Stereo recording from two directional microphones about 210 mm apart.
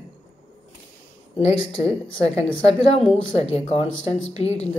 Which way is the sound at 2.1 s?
30° left (ahead or behind).